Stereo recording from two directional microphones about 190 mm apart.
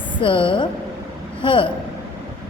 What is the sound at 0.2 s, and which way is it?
A woman's voice, 25° left (ahead or behind).